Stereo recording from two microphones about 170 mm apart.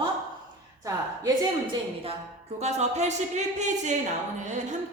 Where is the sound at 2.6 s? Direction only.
40° right (ahead or behind).